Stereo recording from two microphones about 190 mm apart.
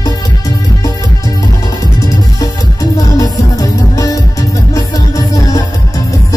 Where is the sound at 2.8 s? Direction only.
20° left (ahead or behind).